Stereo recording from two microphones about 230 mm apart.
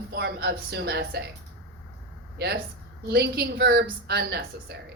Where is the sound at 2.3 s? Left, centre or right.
Right.